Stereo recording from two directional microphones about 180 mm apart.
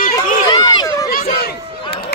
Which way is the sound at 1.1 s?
55° left (ahead or behind).